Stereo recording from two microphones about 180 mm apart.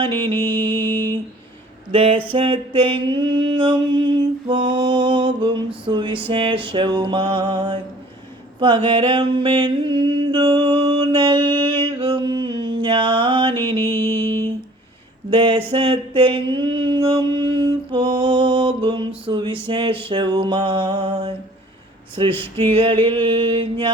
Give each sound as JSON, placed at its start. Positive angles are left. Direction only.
{"t": 0.3, "sound": "mantra", "side_deg": -25}
{"t": 11.8, "sound": "a sound", "side_deg": -30}
{"t": 13.7, "sound": "mantra", "side_deg": -30}